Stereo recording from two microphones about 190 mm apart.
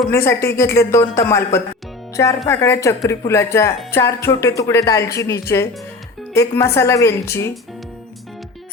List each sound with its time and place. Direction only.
0.1 s a woman's voice: 15° left (ahead or behind)
2.5 s a woman's voice: 15° left (ahead or behind)